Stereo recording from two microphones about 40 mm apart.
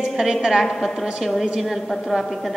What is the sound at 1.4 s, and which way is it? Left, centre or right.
Speech, centre.